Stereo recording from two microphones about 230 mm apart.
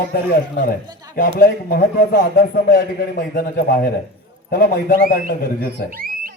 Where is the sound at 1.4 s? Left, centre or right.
Left.